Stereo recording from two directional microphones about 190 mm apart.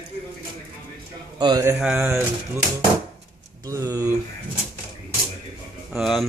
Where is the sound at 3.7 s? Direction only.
15° right (ahead or behind).